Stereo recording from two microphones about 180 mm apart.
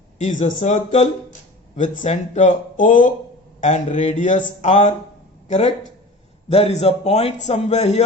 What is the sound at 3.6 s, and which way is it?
Speech, 35° left (ahead or behind).